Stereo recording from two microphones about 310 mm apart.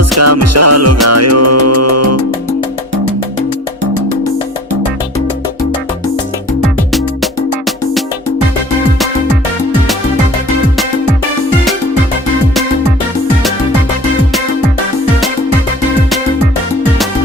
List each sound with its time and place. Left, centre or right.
0.2 s music: right